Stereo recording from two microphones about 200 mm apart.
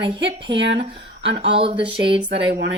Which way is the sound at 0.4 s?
60° right (ahead or behind).